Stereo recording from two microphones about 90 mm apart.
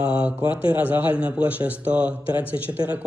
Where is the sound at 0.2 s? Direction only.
15° right (ahead or behind).